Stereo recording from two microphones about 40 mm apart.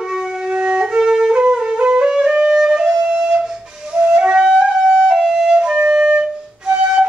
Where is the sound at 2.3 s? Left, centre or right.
Right.